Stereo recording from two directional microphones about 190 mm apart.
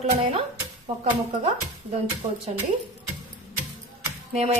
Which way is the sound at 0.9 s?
30° right (ahead or behind).